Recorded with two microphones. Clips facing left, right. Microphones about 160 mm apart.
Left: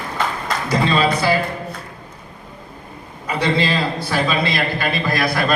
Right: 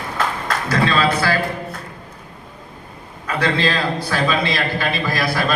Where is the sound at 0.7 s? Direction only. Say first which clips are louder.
Left 1 dB; 15° left (ahead or behind).